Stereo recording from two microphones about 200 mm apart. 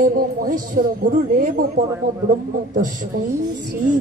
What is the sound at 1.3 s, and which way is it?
A woman's voice, 40° right (ahead or behind).